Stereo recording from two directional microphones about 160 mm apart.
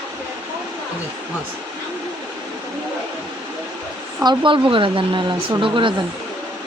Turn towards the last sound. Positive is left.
turn(degrees=-30)  # may be behind; listen again after turning